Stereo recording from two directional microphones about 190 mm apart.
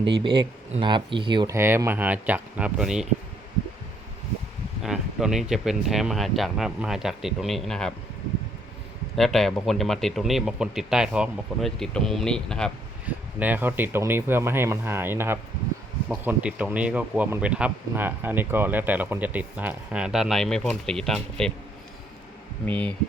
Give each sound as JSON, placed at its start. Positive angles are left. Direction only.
{"t": 0.0, "sound": "speech", "side_deg": -25}
{"t": 1.5, "sound": "speech", "side_deg": -15}
{"t": 4.8, "sound": "speech", "side_deg": -5}
{"t": 9.1, "sound": "speech", "side_deg": 0}
{"t": 13.4, "sound": "speech", "side_deg": -10}
{"t": 22.6, "sound": "speech", "side_deg": 5}